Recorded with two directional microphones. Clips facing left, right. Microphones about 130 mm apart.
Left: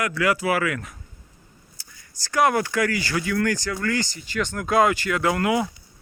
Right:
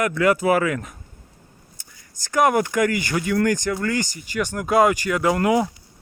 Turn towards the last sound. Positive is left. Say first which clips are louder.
# right 3 dB
turn(degrees=-25)  # may be behind; listen again after turning